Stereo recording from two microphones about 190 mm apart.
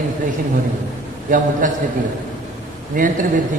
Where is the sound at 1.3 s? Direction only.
45° right (ahead or behind).